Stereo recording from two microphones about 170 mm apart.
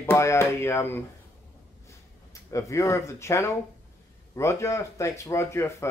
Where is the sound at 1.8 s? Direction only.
15° left (ahead or behind).